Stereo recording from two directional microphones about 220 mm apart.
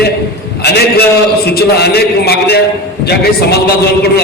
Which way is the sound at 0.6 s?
50° left (ahead or behind).